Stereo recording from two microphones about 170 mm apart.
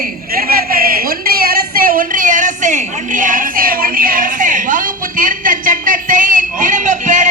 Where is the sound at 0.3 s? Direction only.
60° right (ahead or behind).